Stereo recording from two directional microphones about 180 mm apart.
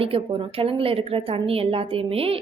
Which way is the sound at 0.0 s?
30° right (ahead or behind).